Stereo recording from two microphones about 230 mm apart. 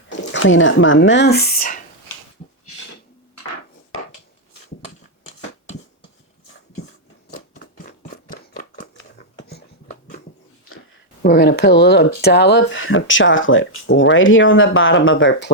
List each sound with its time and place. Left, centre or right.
0.1 s speech: left
7.3 s scissors: left
11.2 s speech: left